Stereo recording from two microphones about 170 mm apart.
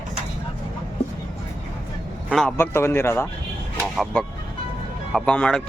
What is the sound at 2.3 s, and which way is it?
Speech, centre (ahead or behind).